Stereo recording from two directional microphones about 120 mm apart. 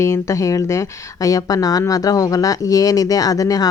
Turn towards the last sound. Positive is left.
turn(degrees=30)  # may be behind; listen again after turning